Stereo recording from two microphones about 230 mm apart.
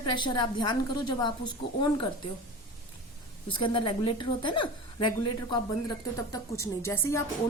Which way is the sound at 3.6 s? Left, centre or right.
Left.